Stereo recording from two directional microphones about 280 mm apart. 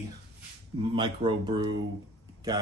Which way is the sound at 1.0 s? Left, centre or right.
Centre.